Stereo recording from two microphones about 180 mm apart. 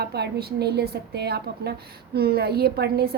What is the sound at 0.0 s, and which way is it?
A woman's voice, 65° right (ahead or behind).